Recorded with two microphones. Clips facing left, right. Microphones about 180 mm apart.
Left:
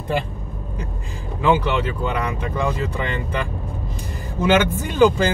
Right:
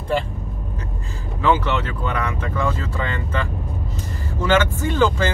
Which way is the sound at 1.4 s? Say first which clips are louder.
Left 1 dB; 10° left (ahead or behind).